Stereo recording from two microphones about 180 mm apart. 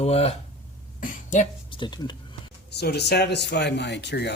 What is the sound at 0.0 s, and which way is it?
Speech, 35° left (ahead or behind).